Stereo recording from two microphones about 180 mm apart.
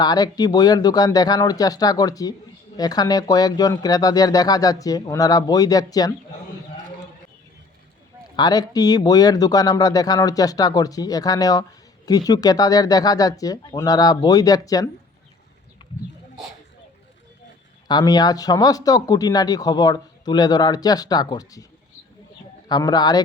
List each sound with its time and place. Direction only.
0.0 s speech: 20° left (ahead or behind)
8.4 s speech: 20° left (ahead or behind)
17.8 s speech: 20° left (ahead or behind)
22.7 s speech: 20° left (ahead or behind)